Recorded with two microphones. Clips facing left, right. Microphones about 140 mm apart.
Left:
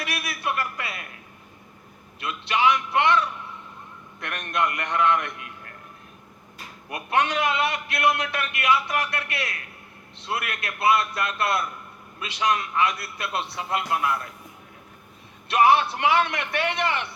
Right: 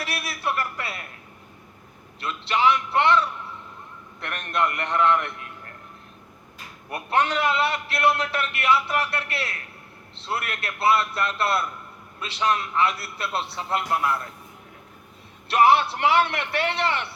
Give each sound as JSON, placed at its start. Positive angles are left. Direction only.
{"t": 0.0, "sound": "a sound", "side_deg": -30}
{"t": 2.2, "sound": "a man's voice", "side_deg": -30}
{"t": 6.9, "sound": "a man's voice", "side_deg": -30}
{"t": 15.4, "sound": "a man's voice", "side_deg": -30}